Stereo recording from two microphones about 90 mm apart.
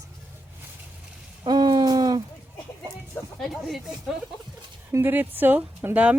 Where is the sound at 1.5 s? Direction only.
50° right (ahead or behind).